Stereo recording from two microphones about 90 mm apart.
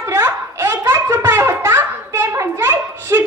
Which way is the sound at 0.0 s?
30° right (ahead or behind).